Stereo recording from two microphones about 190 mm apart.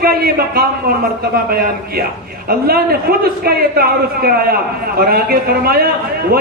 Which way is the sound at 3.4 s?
55° right (ahead or behind).